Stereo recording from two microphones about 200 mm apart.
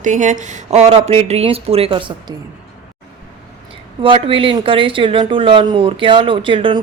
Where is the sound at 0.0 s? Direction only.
40° right (ahead or behind).